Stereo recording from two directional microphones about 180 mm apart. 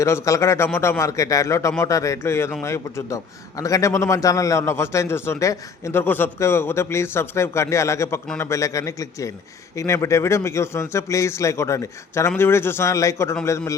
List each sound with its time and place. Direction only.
0.0 s a man's voice: 15° left (ahead or behind)